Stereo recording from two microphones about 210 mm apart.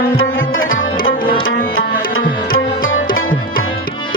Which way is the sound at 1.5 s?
70° left (ahead or behind).